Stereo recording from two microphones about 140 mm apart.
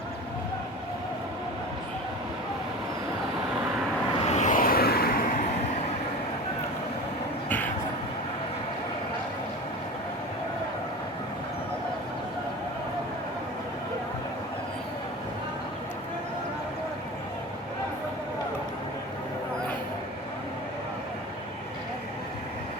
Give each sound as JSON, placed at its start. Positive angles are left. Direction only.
{"t": 4.3, "sound": "vehicle", "side_deg": 60}